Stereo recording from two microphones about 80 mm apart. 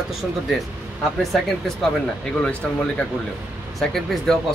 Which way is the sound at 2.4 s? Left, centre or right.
Centre.